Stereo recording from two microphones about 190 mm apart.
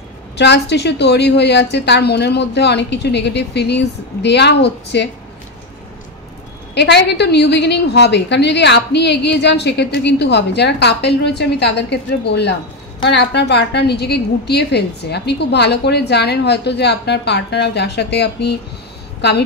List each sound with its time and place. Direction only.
0.4 s a woman's voice: 65° left (ahead or behind)
6.7 s a woman's voice: 60° left (ahead or behind)